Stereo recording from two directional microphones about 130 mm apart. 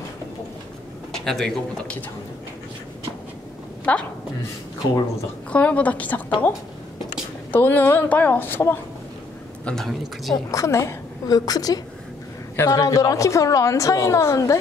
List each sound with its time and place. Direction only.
1.1 s speech: 5° left (ahead or behind)
3.9 s speech: 10° left (ahead or behind)
5.5 s speech: 10° left (ahead or behind)
7.5 s speech: 15° left (ahead or behind)
9.7 s speech: centre (ahead or behind)
10.5 s a woman's voice: 25° left (ahead or behind)